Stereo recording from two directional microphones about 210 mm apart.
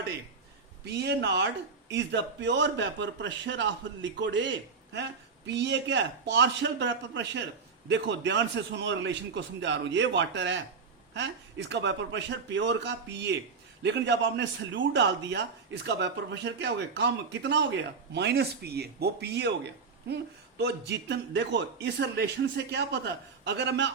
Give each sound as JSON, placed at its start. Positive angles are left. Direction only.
{"t": 0.9, "sound": "a man's voice", "side_deg": -55}